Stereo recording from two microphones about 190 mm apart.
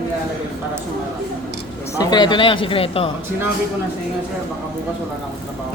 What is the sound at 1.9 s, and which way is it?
Speech, 20° left (ahead or behind).